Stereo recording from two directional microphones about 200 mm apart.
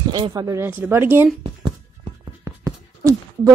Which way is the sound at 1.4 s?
30° right (ahead or behind).